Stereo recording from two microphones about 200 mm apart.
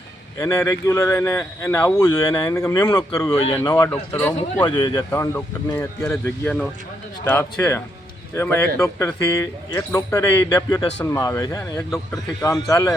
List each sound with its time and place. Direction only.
0.3 s speech: 15° left (ahead or behind)
4.6 s speech: 25° left (ahead or behind)